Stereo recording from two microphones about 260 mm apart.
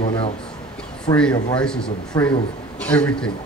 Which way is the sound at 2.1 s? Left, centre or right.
Centre.